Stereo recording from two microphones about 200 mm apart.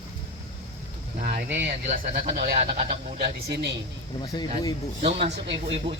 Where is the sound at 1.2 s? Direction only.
55° right (ahead or behind).